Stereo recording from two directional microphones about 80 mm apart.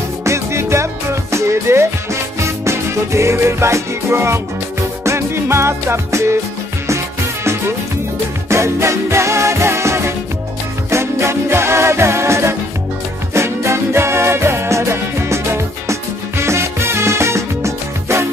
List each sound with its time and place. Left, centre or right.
0.2 s music: right
8.5 s music: right